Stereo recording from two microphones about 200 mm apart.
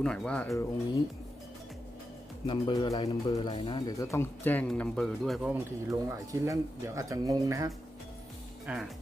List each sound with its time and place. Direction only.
0.0 s speech: 5° left (ahead or behind)
2.4 s speech: 25° left (ahead or behind); by 5.6 s centre (ahead or behind)
5.9 s speech: 15° right (ahead or behind)
8.6 s speech: centre (ahead or behind)